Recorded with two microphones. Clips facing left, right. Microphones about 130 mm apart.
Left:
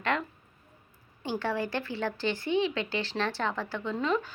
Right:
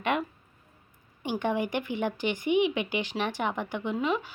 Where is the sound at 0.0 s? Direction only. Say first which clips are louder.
Right 2 dB; 15° right (ahead or behind).